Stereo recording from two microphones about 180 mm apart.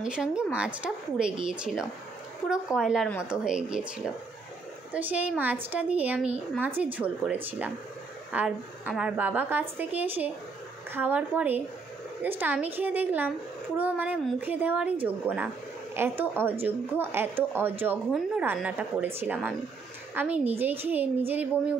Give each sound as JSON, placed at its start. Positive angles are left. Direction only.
{"t": 0.0, "sound": "speech", "side_deg": -5}
{"t": 4.9, "sound": "a woman's voice", "side_deg": -10}